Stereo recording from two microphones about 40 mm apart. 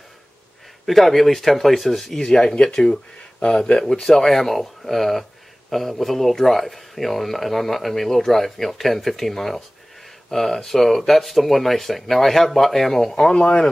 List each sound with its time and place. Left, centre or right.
0.8 s speech: centre
2.2 s speech: left
3.9 s speech: centre